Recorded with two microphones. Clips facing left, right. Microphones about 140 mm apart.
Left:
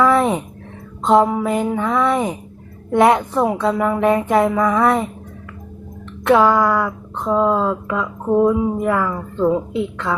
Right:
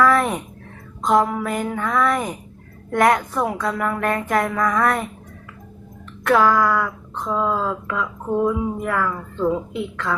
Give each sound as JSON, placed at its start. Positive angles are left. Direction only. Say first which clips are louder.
{"t": 0.0, "sound": "a sound", "louder": "left 3 dB", "side_deg": 25}
{"t": 1.0, "sound": "speech", "louder": "left 4 dB", "side_deg": 25}
{"t": 6.2, "sound": "speech", "louder": "left 3 dB", "side_deg": 25}